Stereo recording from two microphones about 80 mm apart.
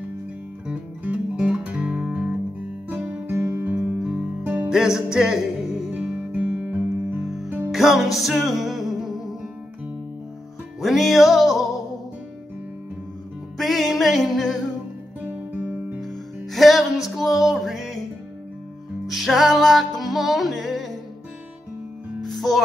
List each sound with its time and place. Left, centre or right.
0.7 s guitar: centre
3.5 s guitar: right
4.0 s guitar: centre
4.4 s music: right
4.6 s music: centre
7.2 s music: centre
7.4 s music: centre
7.7 s music: centre
10.8 s music: centre
13.6 s music: centre
15.2 s guitar: centre
16.0 s music: centre
19.0 s music: centre
22.2 s music: centre